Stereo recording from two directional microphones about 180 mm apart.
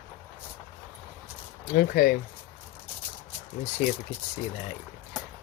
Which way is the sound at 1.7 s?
55° left (ahead or behind).